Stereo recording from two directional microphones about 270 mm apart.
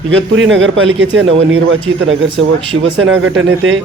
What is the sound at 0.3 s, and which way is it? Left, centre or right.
Speech, right.